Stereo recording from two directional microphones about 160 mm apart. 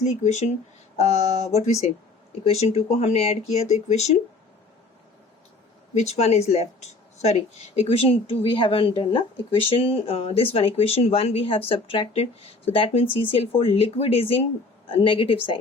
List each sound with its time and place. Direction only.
0.0 s speech: 45° left (ahead or behind)
5.9 s speech: 45° left (ahead or behind)